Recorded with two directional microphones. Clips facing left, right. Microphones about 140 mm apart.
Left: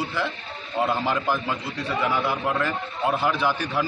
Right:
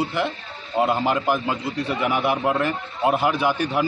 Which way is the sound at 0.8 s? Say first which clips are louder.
Right 3 dB; 10° right (ahead or behind).